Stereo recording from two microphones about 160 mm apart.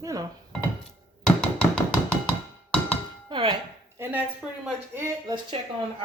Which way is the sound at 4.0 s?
10° right (ahead or behind).